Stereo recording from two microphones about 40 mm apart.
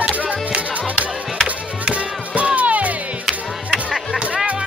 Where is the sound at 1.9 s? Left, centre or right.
Right.